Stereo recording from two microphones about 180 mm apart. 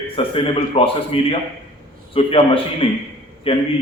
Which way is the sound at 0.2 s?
30° left (ahead or behind).